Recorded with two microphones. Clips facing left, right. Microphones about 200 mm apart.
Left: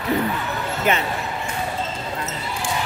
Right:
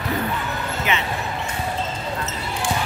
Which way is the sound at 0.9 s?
45° left (ahead or behind).